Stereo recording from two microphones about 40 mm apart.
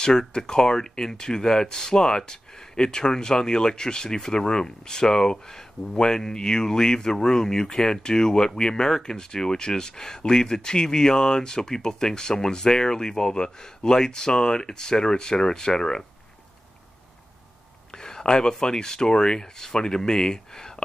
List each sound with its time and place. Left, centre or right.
0.0 s speech: centre
17.9 s speech: centre